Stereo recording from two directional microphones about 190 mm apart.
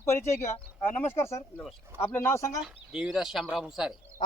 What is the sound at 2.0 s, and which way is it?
Speech, 10° left (ahead or behind).